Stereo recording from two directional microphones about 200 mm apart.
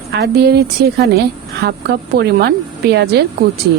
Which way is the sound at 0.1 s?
55° right (ahead or behind).